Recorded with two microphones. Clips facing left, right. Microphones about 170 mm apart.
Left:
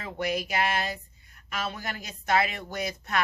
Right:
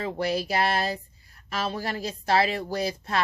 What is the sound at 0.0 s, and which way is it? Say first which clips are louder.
A woman's voice: right 3 dB; 30° right (ahead or behind).